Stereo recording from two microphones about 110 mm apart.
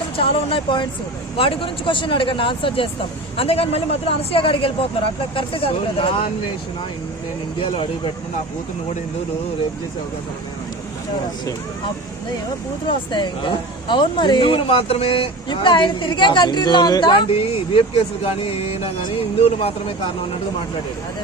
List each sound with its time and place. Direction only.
0.2 s speech: 55° left (ahead or behind)
12.9 s speech: 45° left (ahead or behind)
17.3 s speech: 60° left (ahead or behind)